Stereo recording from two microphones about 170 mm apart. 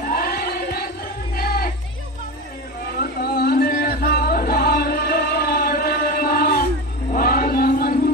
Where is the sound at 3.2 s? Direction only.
65° left (ahead or behind).